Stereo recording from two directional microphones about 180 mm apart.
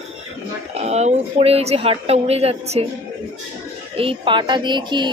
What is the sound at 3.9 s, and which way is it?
A woman's voice, 30° right (ahead or behind).